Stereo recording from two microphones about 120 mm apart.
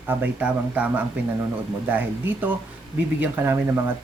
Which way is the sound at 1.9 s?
15° right (ahead or behind).